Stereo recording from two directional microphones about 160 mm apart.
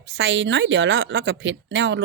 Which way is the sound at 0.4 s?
90° right.